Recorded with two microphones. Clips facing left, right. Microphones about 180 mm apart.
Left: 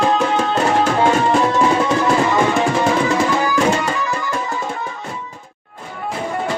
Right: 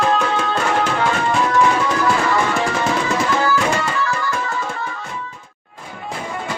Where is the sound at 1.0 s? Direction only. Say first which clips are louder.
Left 4 dB; 25° left (ahead or behind).